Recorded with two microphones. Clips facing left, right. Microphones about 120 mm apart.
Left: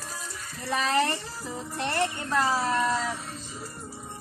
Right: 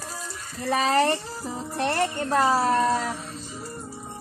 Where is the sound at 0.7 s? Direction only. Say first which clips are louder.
Right 4 dB; 45° right (ahead or behind).